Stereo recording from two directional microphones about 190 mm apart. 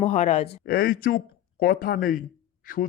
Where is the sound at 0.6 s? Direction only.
50° left (ahead or behind).